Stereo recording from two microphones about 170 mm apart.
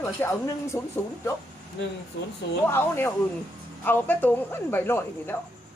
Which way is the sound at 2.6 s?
15° left (ahead or behind).